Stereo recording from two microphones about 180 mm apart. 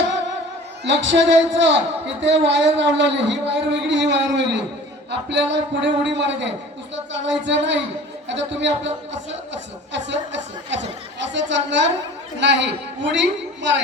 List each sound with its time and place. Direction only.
0.9 s a woman's voice: 85° right
5.3 s a woman's voice: 75° right (ahead or behind)
7.1 s music: 85° right
8.3 s a woman's voice: 80° right
9.9 s a woman's voice: 80° right